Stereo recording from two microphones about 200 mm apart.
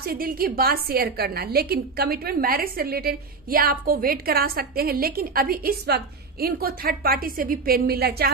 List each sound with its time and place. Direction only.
0.0 s a woman's voice: 45° right (ahead or behind)